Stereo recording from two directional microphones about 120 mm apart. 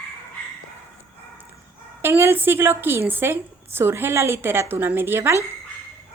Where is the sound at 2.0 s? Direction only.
20° right (ahead or behind).